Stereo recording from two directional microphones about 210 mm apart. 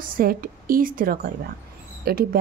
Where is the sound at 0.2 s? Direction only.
45° right (ahead or behind).